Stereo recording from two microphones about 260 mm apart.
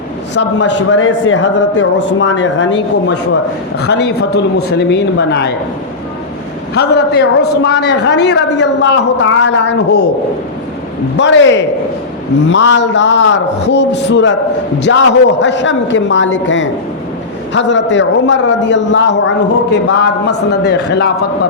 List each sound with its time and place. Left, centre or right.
0.3 s a man's voice: left
6.7 s a man's voice: left
11.2 s a man's voice: left